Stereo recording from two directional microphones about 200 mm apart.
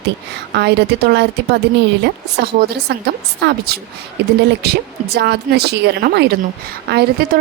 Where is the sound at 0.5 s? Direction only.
55° right (ahead or behind).